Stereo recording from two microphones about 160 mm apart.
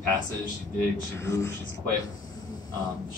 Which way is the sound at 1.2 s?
20° left (ahead or behind).